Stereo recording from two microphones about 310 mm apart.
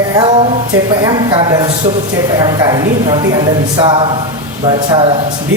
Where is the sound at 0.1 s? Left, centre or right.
Centre.